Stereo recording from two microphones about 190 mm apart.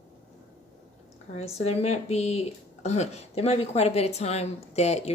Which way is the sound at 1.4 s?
35° left (ahead or behind).